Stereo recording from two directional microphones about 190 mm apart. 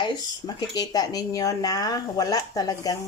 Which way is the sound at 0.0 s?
20° left (ahead or behind).